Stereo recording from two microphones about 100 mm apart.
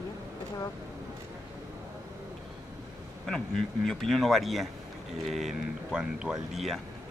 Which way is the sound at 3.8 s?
5° left (ahead or behind).